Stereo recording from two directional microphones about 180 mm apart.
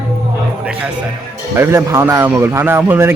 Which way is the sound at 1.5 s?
15° right (ahead or behind).